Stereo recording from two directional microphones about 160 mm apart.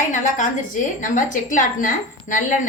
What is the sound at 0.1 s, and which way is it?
A woman's voice, 50° left (ahead or behind).